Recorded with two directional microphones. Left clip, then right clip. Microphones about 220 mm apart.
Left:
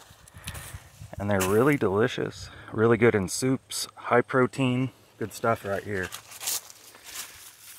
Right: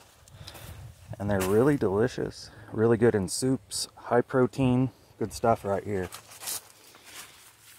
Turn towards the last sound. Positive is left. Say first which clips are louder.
# left 5 dB
turn(degrees=30)  # may be behind; listen again after turning